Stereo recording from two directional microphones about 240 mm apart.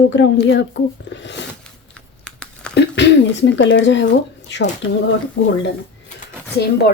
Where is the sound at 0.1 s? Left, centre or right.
Left.